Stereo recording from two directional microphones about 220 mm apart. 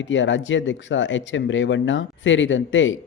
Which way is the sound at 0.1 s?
55° left (ahead or behind).